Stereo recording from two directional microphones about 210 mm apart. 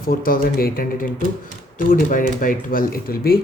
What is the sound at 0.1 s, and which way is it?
Speech, 40° left (ahead or behind).